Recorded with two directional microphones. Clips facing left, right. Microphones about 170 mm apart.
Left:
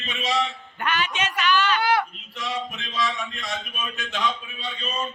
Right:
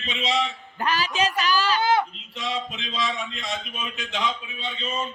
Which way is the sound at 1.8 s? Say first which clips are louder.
Right 1 dB; 20° right (ahead or behind).